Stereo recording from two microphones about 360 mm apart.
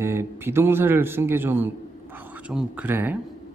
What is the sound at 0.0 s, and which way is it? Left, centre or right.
Speech, centre.